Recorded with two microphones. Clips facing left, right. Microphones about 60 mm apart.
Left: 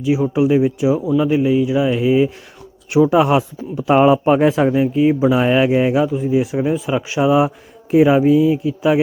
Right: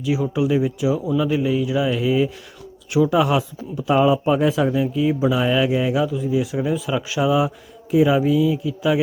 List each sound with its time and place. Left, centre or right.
0.0 s speech: left
3.8 s speech: left